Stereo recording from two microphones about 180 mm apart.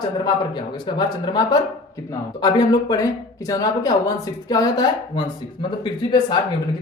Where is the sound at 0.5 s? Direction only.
25° left (ahead or behind).